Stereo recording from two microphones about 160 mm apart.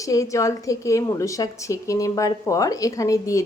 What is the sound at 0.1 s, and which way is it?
Speech, 20° left (ahead or behind).